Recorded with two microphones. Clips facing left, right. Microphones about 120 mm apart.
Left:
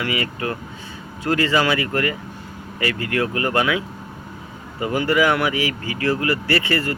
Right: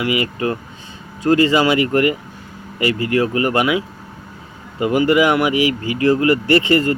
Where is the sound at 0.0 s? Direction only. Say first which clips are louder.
Right 5 dB; 20° right (ahead or behind).